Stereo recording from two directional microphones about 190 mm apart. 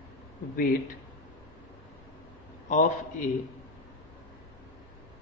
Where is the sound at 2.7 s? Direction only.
40° left (ahead or behind).